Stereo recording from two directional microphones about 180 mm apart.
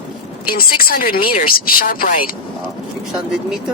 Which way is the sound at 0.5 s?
55° left (ahead or behind).